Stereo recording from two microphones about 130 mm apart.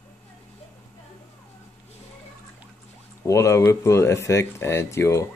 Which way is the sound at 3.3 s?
20° left (ahead or behind).